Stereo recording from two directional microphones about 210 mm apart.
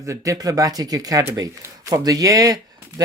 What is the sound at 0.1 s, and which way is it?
Speech, 15° right (ahead or behind).